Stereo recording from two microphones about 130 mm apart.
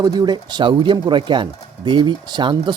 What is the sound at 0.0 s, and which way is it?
Speech, 30° right (ahead or behind).